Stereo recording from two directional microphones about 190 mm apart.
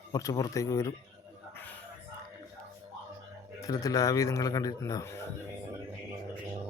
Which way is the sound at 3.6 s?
20° left (ahead or behind).